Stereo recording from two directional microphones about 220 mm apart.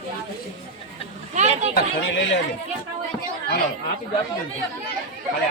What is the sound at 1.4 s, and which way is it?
Speech, 30° right (ahead or behind).